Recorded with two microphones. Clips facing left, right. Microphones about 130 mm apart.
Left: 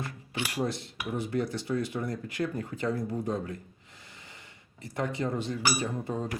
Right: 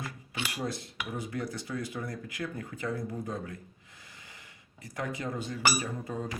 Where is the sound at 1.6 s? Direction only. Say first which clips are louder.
Left 5 dB; 30° left (ahead or behind).